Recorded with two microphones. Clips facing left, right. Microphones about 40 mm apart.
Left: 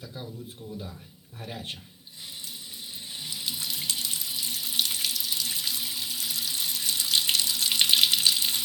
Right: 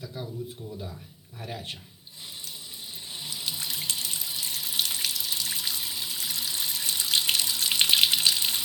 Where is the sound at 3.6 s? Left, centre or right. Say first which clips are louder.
Even; right.